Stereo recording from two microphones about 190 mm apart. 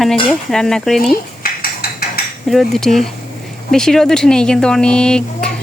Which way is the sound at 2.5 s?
Centre (ahead or behind).